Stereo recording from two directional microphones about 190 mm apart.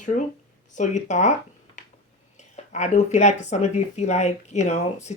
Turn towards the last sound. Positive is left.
turn(degrees=35)  # may be behind; listen again after turning